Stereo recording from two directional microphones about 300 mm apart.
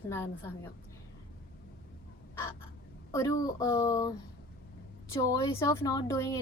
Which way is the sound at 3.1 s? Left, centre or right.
Centre.